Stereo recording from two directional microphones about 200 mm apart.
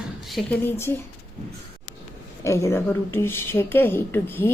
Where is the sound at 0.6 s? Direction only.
10° left (ahead or behind).